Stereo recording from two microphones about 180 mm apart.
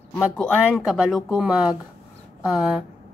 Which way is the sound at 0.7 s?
Centre (ahead or behind).